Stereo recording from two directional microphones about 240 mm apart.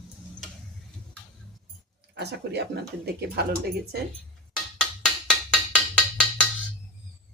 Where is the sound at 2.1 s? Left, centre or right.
Right.